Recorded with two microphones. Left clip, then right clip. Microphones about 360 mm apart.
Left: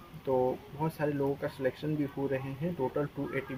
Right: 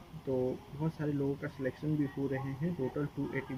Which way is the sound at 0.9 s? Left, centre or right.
Left.